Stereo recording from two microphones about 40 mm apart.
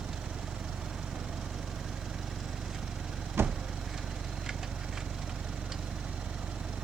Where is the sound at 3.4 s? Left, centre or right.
Right.